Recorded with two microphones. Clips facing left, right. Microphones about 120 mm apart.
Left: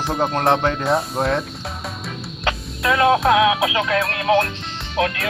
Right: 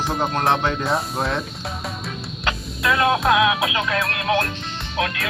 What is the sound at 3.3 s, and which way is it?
Music, 30° left (ahead or behind).